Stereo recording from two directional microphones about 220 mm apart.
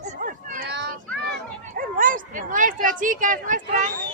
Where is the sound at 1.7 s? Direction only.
40° right (ahead or behind).